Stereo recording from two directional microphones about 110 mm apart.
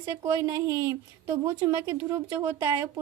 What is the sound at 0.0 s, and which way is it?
A woman's voice, 25° right (ahead or behind).